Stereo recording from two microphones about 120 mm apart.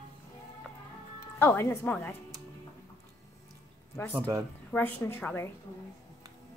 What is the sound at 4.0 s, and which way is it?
A woman's voice, 20° left (ahead or behind).